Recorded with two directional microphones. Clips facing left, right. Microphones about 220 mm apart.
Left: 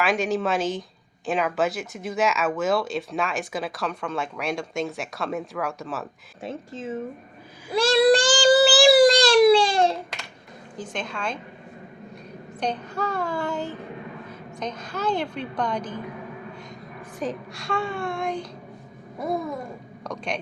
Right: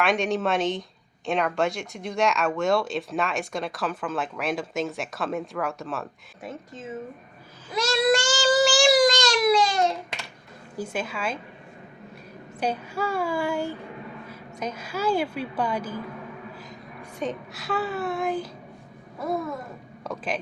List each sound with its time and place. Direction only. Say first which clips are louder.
0.0 s speech: even; centre (ahead or behind)
6.4 s speech: left 4 dB; 30° left (ahead or behind)
7.8 s child singing: left 5 dB; 30° left (ahead or behind)
10.8 s a woman's voice: right 2 dB; 10° right (ahead or behind)
12.5 s a woman's voice: even; 5° right (ahead or behind)
17.2 s speech: left 1 dB; centre (ahead or behind)
19.2 s babbling: left 1 dB; 15° left (ahead or behind)
20.1 s speech: even; 5° right (ahead or behind)